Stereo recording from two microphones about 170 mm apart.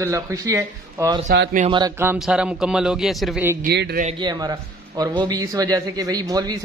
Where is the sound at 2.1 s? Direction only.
5° right (ahead or behind).